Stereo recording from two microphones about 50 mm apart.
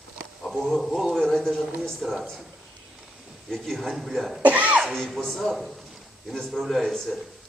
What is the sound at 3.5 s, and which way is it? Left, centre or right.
Speech, centre.